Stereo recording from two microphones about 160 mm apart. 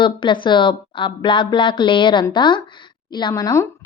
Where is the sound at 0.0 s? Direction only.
30° left (ahead or behind).